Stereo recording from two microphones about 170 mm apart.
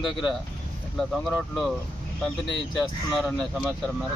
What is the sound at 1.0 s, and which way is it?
Speech, centre (ahead or behind).